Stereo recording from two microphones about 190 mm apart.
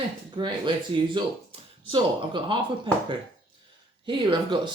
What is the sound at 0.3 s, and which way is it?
Speech, 25° right (ahead or behind).